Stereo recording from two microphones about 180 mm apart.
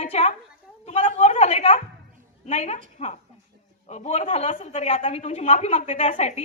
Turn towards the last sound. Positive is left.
turn(degrees=35)  # may be behind; listen again after turning